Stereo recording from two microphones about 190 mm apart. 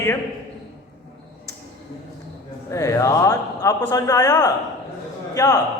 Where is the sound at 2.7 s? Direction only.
15° left (ahead or behind).